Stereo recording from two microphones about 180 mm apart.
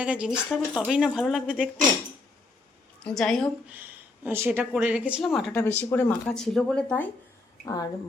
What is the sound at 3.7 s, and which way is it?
Speech, 10° right (ahead or behind).